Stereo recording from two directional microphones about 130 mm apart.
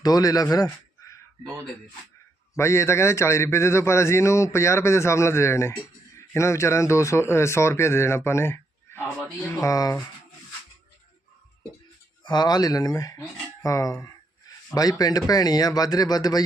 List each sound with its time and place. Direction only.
0.0 s a man's voice: 30° left (ahead or behind)
2.6 s a man's voice: 20° left (ahead or behind)
12.2 s a man's voice: 35° left (ahead or behind)